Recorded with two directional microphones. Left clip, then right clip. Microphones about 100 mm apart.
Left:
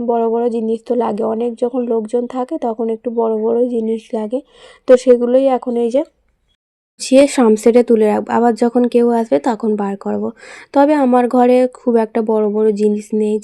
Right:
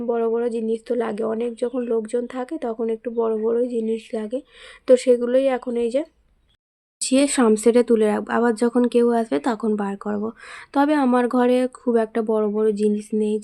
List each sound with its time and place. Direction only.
0.1 s speech: 30° left (ahead or behind); by 13.4 s 50° left (ahead or behind)